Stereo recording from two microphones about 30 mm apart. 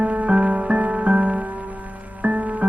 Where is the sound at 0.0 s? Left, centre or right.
Right.